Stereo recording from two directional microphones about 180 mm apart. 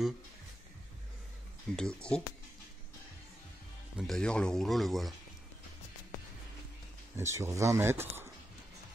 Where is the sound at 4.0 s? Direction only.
5° left (ahead or behind).